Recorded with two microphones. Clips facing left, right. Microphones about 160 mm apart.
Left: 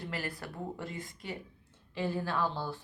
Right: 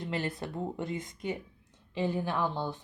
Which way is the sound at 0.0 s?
20° right (ahead or behind).